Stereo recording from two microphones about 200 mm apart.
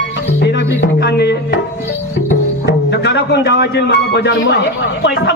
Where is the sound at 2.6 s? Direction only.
60° left (ahead or behind).